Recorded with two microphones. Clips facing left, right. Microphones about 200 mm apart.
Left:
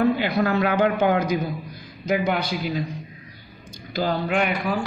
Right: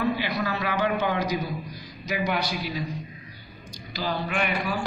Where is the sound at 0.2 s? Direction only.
55° left (ahead or behind).